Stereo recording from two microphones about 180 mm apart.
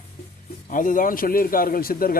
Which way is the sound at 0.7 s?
45° left (ahead or behind).